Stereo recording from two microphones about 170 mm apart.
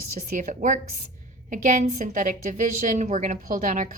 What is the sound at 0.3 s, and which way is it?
A woman's voice, 50° right (ahead or behind).